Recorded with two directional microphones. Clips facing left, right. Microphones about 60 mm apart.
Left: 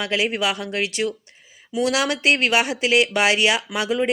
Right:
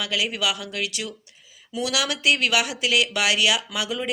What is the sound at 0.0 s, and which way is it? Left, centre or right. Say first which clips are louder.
Speech: left 4 dB; left.